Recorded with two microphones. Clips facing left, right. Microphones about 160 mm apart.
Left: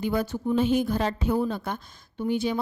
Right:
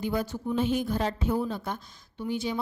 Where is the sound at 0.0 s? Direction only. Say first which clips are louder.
Left 3 dB; 65° left (ahead or behind).